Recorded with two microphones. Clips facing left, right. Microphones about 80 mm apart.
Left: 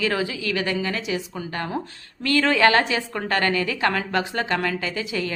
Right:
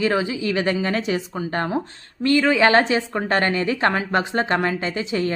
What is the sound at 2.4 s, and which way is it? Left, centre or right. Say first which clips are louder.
Speech: even; centre.